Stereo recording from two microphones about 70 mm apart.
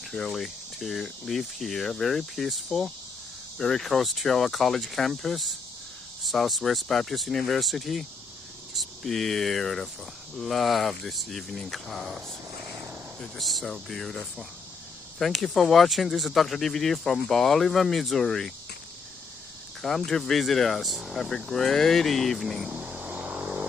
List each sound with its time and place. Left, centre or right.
0.1 s speech: centre
19.8 s speech: centre
22.7 s vehicle: centre